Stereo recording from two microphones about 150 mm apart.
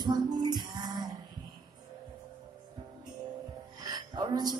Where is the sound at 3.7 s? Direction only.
25° right (ahead or behind).